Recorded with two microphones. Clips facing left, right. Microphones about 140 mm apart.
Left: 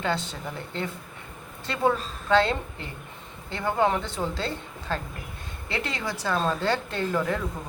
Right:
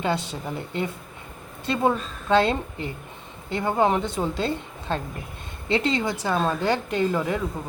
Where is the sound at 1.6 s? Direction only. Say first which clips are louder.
Right 2 dB; 20° right (ahead or behind).